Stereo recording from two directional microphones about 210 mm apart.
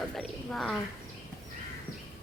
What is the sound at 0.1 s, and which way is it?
Speech, centre (ahead or behind).